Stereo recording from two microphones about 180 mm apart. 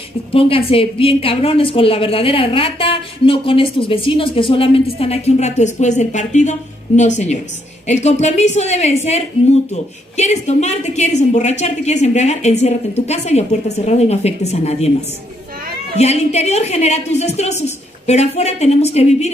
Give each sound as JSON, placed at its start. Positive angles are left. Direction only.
{"t": 0.3, "sound": "a woman's voice", "side_deg": 30}
{"t": 16.0, "sound": "a woman's voice", "side_deg": 35}